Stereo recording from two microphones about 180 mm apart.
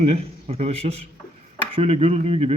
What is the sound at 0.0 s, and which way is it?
Speech, 30° right (ahead or behind).